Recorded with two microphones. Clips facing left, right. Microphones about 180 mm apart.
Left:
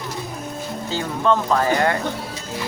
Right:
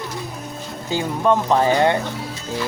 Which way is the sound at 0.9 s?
15° right (ahead or behind).